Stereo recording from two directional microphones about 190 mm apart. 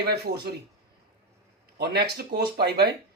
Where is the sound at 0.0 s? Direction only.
55° right (ahead or behind).